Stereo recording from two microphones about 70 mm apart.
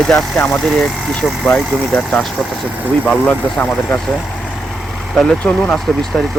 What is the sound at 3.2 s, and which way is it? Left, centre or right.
Speech, left.